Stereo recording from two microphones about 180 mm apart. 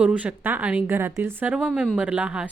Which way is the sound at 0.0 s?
5° right (ahead or behind).